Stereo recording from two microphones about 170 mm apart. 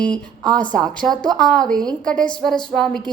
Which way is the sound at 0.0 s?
5° left (ahead or behind).